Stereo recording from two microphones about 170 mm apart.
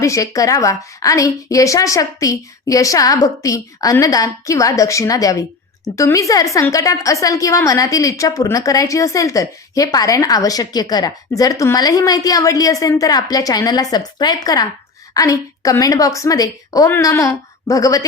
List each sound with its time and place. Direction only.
0.0 s a woman's voice: 20° left (ahead or behind)